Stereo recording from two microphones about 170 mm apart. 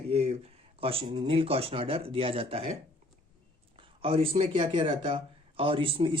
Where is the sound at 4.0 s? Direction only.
35° right (ahead or behind).